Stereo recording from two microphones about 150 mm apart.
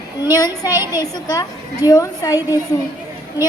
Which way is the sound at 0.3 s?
25° left (ahead or behind).